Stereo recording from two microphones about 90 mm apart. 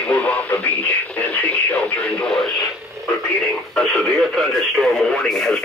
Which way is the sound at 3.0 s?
35° right (ahead or behind).